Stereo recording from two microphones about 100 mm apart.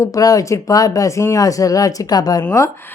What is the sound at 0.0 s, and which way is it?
Speech, 35° left (ahead or behind).